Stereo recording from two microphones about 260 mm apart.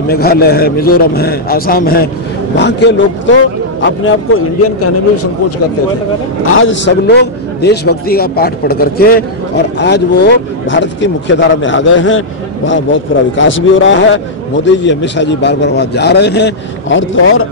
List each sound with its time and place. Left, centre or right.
0.1 s a man's voice: left
6.4 s a man's voice: left